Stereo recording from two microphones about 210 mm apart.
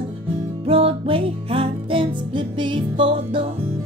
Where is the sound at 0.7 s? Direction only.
25° right (ahead or behind).